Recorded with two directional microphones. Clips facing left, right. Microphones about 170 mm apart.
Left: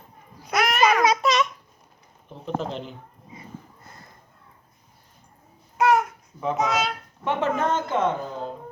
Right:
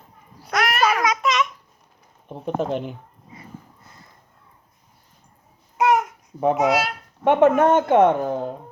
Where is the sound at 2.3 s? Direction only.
55° right (ahead or behind).